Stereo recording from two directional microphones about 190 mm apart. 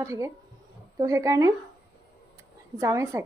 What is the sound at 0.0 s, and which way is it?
A man's voice, 15° right (ahead or behind).